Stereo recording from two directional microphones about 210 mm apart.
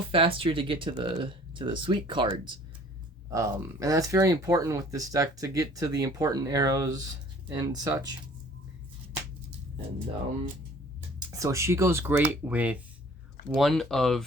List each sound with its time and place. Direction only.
0.1 s speech: 25° right (ahead or behind)
11.3 s speech: 15° right (ahead or behind); by 14.3 s centre (ahead or behind)